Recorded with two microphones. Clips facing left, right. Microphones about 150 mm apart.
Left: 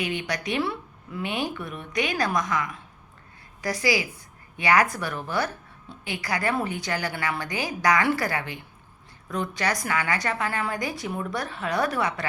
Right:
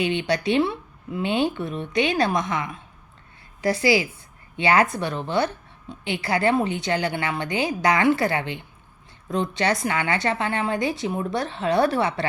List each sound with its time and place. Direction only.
0.0 s a woman's voice: 25° right (ahead or behind)